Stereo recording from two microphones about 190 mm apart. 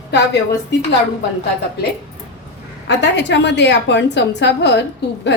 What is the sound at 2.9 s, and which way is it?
A woman's voice, 65° left (ahead or behind).